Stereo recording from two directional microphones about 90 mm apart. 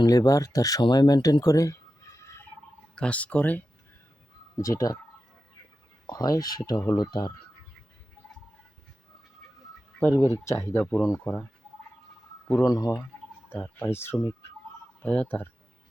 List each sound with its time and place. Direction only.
0.0 s speech: 45° left (ahead or behind)
2.9 s speech: 10° left (ahead or behind)
4.5 s speech: 40° left (ahead or behind)
6.1 s speech: 45° left (ahead or behind)
10.2 s speech: 35° left (ahead or behind)
12.6 s speech: 45° left (ahead or behind)
13.6 s speech: 15° left (ahead or behind)